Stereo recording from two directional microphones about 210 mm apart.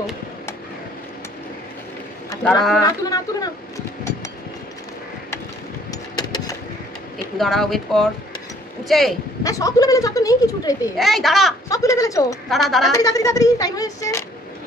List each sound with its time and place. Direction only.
2.8 s a woman's voice: 15° left (ahead or behind)
5.9 s a sound: 20° left (ahead or behind)
7.3 s speech: centre (ahead or behind)
9.4 s a woman's voice: 15° left (ahead or behind)
11.0 s speech: centre (ahead or behind)
11.7 s a woman's voice: 15° left (ahead or behind)
12.4 s speech: centre (ahead or behind)
12.9 s a woman's voice: 15° left (ahead or behind)